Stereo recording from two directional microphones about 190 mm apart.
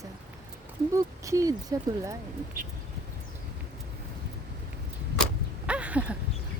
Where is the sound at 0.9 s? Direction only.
15° right (ahead or behind).